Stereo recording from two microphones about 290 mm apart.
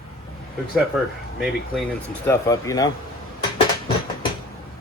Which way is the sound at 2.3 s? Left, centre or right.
Centre.